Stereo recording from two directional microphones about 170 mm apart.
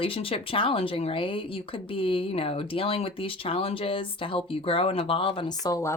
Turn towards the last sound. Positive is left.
turn(degrees=20)  # may be behind; listen again after turning